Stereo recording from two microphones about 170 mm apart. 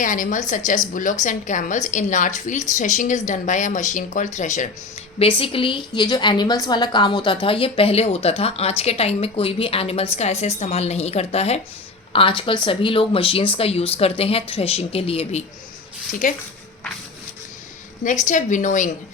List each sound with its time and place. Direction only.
0.0 s a woman's voice: 50° left (ahead or behind)
5.4 s a woman's voice: 30° left (ahead or behind)
16.2 s a woman's voice: 50° left (ahead or behind)
18.0 s a woman's voice: 45° left (ahead or behind)